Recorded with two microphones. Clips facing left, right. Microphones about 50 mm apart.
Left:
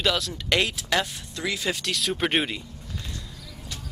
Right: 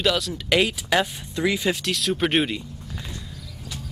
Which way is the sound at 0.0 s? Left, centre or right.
Centre.